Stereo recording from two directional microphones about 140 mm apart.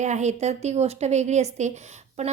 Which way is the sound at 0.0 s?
55° right (ahead or behind).